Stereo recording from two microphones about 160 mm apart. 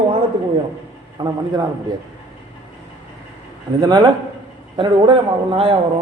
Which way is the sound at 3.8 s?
25° right (ahead or behind).